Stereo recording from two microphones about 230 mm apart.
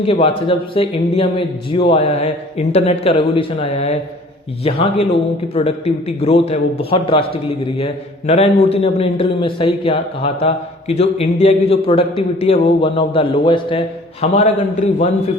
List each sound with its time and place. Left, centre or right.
0.0 s a man's voice: left
5.5 s a man's voice: left